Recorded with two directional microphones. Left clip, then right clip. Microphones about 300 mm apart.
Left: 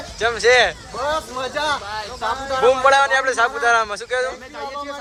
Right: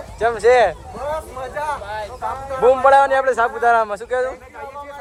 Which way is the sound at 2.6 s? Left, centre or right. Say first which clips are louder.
Right 2 dB; centre.